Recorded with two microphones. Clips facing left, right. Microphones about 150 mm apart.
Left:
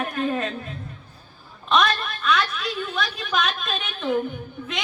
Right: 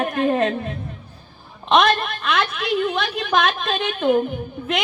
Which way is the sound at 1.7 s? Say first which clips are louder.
Right 5 dB; 65° right (ahead or behind).